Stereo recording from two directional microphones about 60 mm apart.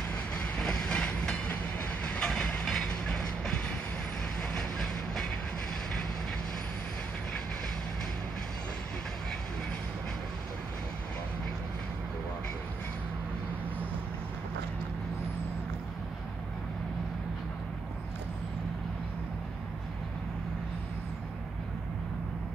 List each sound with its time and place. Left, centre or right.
0.1 s train: centre